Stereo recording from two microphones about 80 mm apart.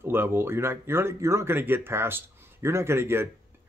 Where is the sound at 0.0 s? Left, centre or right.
Right.